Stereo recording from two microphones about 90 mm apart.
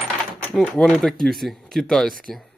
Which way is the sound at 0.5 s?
10° left (ahead or behind).